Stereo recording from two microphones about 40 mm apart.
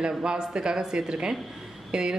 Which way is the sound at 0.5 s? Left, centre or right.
Centre.